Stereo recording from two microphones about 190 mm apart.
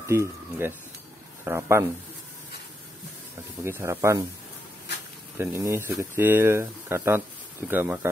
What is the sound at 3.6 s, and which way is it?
Speech, 15° right (ahead or behind).